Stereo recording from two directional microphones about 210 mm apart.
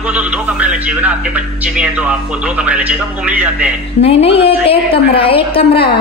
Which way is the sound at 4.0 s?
30° left (ahead or behind).